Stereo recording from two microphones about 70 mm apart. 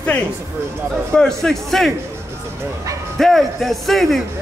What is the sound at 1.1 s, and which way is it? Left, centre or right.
Speech, centre.